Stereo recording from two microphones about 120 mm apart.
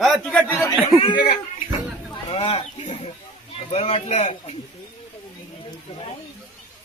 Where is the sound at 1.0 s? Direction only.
50° left (ahead or behind).